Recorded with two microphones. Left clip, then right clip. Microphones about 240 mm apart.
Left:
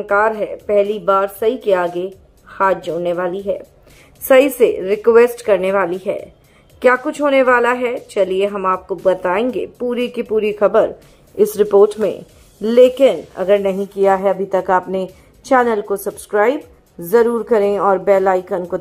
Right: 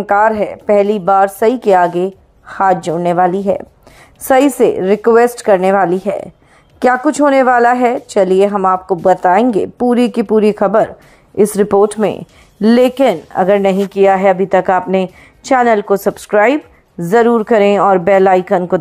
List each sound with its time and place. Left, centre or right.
0.0 s a woman's voice: right